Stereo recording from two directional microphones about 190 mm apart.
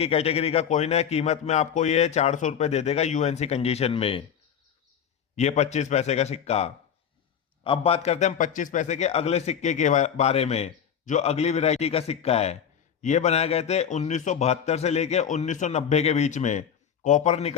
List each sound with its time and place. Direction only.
0.0 s a man's voice: 30° left (ahead or behind)
5.4 s a man's voice: 35° left (ahead or behind)